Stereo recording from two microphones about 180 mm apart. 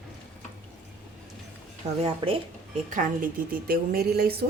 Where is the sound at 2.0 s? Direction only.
30° right (ahead or behind).